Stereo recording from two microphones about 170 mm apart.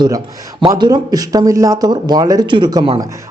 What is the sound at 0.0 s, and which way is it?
Speech, 20° right (ahead or behind).